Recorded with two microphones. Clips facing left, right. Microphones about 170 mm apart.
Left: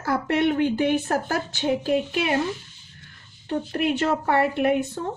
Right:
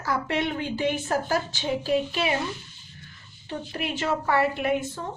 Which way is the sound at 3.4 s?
55° left (ahead or behind).